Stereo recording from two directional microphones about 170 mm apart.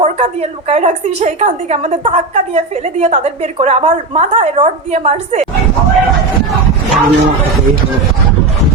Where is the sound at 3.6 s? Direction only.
45° right (ahead or behind).